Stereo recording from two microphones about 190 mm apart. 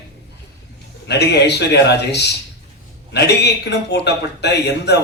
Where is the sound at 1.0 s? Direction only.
60° left (ahead or behind).